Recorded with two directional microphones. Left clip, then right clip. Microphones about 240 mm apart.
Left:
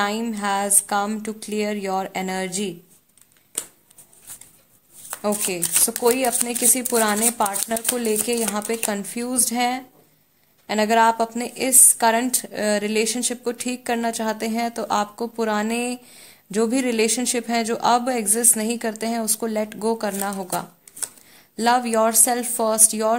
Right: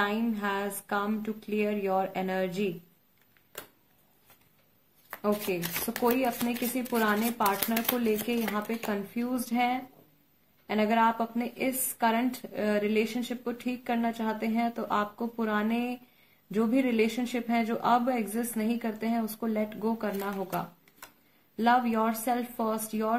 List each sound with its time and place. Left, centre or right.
0.0 s a woman's voice: left
5.5 s a woman's voice: left